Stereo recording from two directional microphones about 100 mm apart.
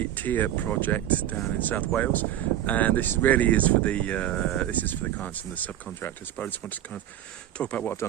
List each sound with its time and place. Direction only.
0.0 s speech: 20° left (ahead or behind)